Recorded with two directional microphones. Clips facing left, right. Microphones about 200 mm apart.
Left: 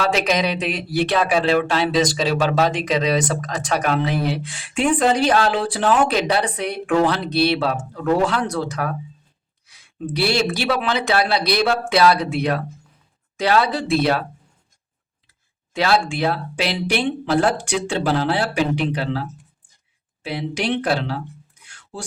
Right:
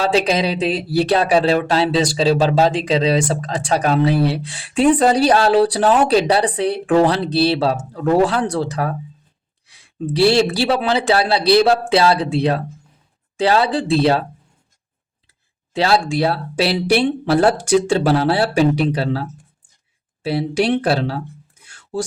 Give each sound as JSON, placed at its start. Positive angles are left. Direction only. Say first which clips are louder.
{"t": 0.0, "sound": "speech", "louder": "right 3 dB", "side_deg": -30}
{"t": 15.7, "sound": "speech", "louder": "right 3 dB", "side_deg": -30}
{"t": 20.2, "sound": "speech", "louder": "right 6 dB", "side_deg": -40}